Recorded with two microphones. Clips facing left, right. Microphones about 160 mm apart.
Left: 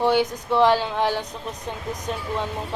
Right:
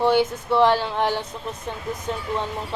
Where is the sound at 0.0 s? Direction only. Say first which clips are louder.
Right 1 dB; 15° left (ahead or behind).